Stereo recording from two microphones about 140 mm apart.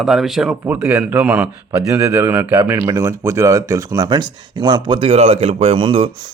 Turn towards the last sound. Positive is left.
turn(degrees=-40)  # may be behind; listen again after turning